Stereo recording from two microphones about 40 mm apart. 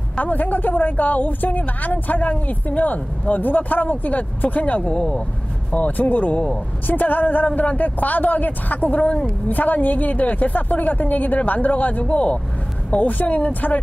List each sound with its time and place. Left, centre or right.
0.2 s a woman's voice: left
4.8 s speech: left
5.7 s a woman's voice: left
12.1 s speech: left
12.9 s a woman's voice: left